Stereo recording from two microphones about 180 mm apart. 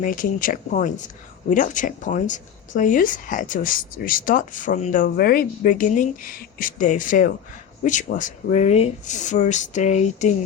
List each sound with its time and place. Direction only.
0.0 s speech: 50° left (ahead or behind)